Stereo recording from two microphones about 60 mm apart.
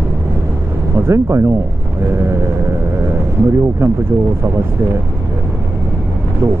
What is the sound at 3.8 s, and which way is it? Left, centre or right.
Speech, right.